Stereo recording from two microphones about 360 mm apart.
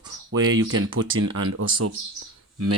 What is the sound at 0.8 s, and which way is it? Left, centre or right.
Speech, right.